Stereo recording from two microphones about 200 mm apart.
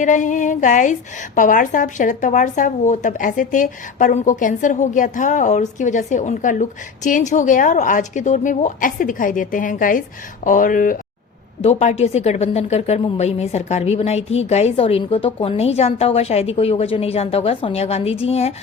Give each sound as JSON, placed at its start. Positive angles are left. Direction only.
{"t": 0.0, "sound": "speech", "side_deg": 40}